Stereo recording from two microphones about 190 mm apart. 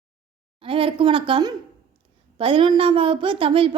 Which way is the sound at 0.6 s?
30° right (ahead or behind).